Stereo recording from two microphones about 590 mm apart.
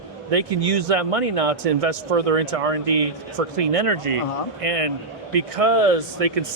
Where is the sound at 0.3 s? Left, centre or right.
Right.